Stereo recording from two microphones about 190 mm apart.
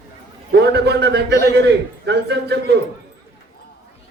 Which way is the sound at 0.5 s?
60° right (ahead or behind).